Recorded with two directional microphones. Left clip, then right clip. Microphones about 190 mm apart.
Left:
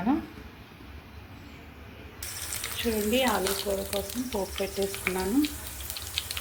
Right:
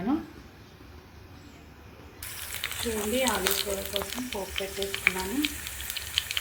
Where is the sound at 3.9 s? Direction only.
Centre (ahead or behind).